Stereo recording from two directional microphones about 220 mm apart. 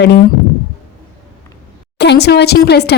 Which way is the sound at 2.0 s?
50° left (ahead or behind).